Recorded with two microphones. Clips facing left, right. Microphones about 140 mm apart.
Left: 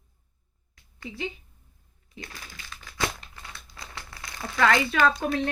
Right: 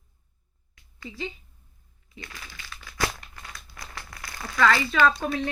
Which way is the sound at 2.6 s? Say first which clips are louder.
Right 1 dB; 25° left (ahead or behind).